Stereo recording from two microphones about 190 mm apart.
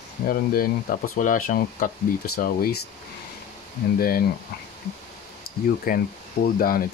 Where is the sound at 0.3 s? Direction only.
50° left (ahead or behind).